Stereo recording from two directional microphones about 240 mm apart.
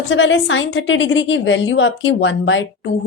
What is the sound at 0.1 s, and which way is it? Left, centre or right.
Speech, left.